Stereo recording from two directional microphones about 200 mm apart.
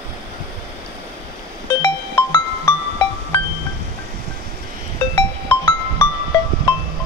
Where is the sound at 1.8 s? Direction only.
20° left (ahead or behind).